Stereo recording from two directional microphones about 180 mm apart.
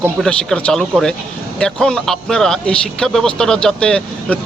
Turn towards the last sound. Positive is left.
turn(degrees=5)  # may be behind; listen again after turning